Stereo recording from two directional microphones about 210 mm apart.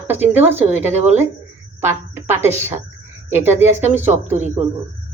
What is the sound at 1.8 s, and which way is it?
A woman's voice, 10° right (ahead or behind).